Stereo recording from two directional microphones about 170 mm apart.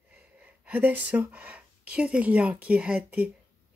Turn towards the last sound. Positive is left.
turn(degrees=-10)  # may be behind; listen again after turning